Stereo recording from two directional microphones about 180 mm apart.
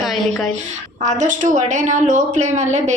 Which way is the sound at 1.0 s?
40° right (ahead or behind).